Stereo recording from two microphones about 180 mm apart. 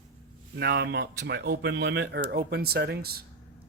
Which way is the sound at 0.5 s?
65° right (ahead or behind).